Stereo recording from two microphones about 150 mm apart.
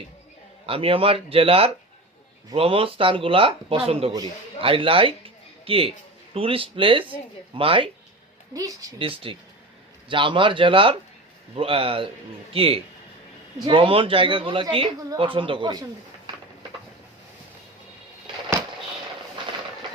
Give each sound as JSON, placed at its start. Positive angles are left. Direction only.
{"t": 0.6, "sound": "speech", "side_deg": -40}
{"t": 8.5, "sound": "speech", "side_deg": -25}
{"t": 9.0, "sound": "speech", "side_deg": -35}